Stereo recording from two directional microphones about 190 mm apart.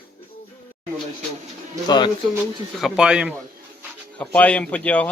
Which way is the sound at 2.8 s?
5° right (ahead or behind).